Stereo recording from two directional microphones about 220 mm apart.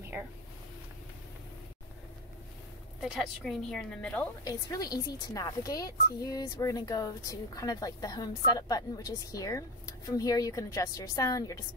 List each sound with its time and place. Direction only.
3.0 s a woman's voice: centre (ahead or behind)
4.5 s speech: 15° left (ahead or behind)